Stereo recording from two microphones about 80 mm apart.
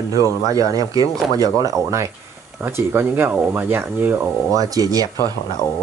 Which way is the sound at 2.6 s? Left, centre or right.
Right.